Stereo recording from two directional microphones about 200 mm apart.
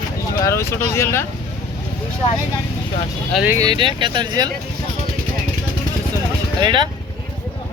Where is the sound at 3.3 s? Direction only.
10° right (ahead or behind).